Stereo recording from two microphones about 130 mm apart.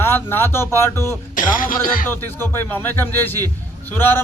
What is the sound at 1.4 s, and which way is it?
Speech, 90° left.